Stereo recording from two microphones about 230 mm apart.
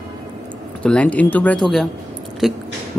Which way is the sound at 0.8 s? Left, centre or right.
Centre.